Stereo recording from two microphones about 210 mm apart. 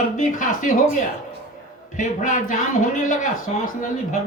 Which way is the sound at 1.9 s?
40° left (ahead or behind).